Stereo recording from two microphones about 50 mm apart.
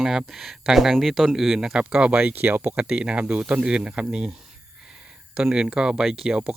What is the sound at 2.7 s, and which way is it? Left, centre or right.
Speech, right.